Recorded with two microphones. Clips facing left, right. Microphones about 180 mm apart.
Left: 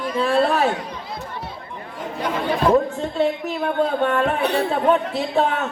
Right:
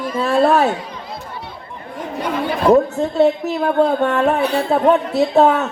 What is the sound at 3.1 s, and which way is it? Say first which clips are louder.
A woman's voice: right 6 dB; 40° right (ahead or behind).